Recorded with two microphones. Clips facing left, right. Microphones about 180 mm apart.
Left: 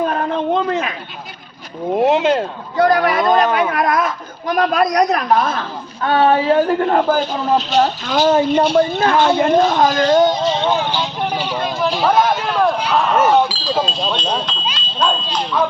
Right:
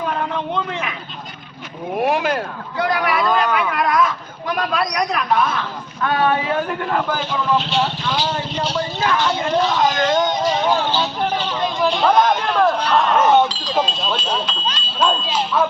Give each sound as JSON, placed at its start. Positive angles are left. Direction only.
{"t": 0.0, "sound": "a sound", "side_deg": 45}
{"t": 0.7, "sound": "speech", "side_deg": 40}
{"t": 1.9, "sound": "speech", "side_deg": 25}
{"t": 2.7, "sound": "a man's voice", "side_deg": 45}
{"t": 6.0, "sound": "a man's voice", "side_deg": 30}
{"t": 10.4, "sound": "music", "side_deg": 25}
{"t": 10.8, "sound": "speech", "side_deg": 15}